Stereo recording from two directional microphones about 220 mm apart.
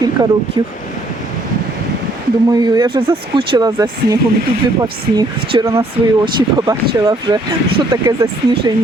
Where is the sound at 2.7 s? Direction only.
20° right (ahead or behind).